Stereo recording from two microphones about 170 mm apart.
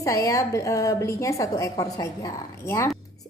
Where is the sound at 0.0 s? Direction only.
20° left (ahead or behind).